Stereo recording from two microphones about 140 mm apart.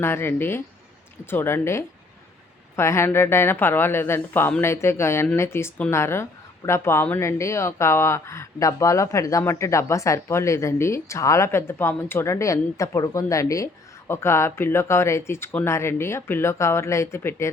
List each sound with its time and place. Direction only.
0.0 s speech: 15° left (ahead or behind)